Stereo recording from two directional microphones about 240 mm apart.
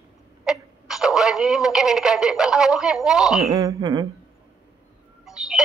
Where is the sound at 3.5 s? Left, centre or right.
Centre.